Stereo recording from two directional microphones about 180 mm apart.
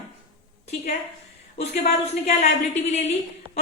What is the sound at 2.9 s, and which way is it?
Speech, 40° left (ahead or behind).